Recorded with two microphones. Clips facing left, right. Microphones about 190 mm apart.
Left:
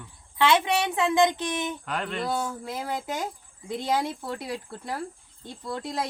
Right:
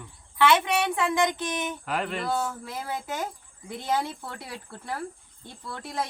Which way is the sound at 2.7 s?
20° left (ahead or behind).